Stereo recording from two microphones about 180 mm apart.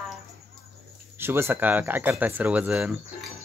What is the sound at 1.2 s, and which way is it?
Speech, 15° right (ahead or behind).